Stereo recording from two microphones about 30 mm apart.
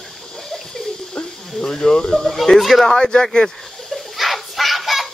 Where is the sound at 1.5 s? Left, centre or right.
Centre.